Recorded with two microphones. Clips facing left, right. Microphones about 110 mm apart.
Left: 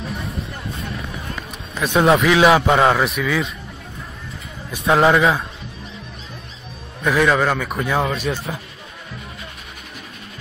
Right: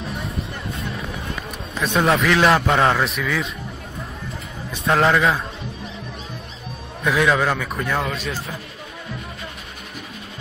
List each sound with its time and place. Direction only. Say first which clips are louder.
0.0 s music: even; centre (ahead or behind)
1.8 s a man's voice: left 3 dB; centre (ahead or behind)
4.8 s a man's voice: left 3 dB; centre (ahead or behind)
7.0 s a man's voice: left 2 dB; centre (ahead or behind)
8.3 s speech: left 4 dB; 25° left (ahead or behind)